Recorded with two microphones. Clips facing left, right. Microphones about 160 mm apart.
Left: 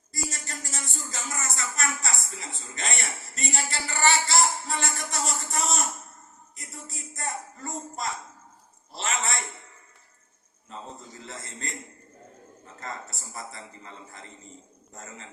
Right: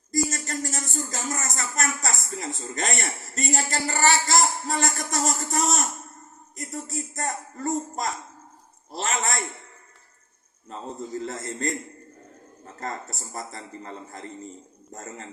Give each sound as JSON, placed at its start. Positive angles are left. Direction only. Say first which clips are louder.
{"t": 0.3, "sound": "music", "louder": "right 8 dB", "side_deg": -40}
{"t": 6.7, "sound": "a sound", "louder": "right 9 dB", "side_deg": -40}
{"t": 11.3, "sound": "a man's voice", "louder": "right 9 dB", "side_deg": -40}
{"t": 12.8, "sound": "a man's voice", "louder": "right 5 dB", "side_deg": -40}